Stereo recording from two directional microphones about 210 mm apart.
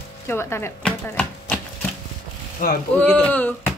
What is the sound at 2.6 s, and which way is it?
Speech, 40° left (ahead or behind).